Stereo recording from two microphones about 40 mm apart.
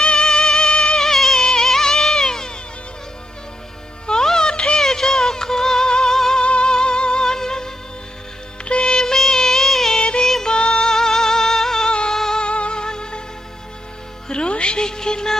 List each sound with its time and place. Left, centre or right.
0.0 s music: left
0.9 s music: centre
4.0 s music: centre
4.8 s music: centre
6.4 s music: left; by 10.0 s centre
10.0 s music: left
10.2 s music: centre
10.5 s music: left
12.4 s music: left
14.3 s music: left